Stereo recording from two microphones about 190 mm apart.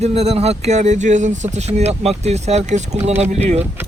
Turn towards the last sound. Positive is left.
turn(degrees=-35)  # may be behind; listen again after turning